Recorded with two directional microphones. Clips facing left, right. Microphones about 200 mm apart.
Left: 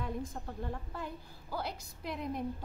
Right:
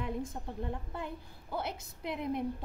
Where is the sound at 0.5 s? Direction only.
25° right (ahead or behind).